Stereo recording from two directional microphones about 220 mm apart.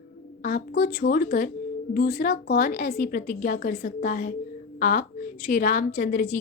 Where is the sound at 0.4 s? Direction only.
40° left (ahead or behind).